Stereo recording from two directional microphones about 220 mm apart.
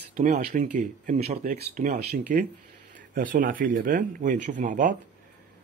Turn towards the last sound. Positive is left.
turn(degrees=-35)  # may be behind; listen again after turning